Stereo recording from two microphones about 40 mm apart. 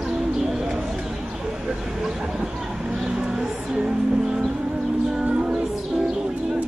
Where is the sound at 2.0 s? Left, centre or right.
Centre.